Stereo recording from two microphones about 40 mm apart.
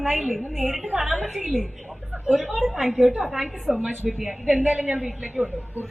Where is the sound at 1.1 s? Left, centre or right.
Centre.